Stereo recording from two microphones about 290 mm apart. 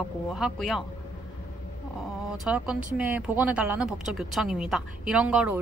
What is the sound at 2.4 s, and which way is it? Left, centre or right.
Speech, centre.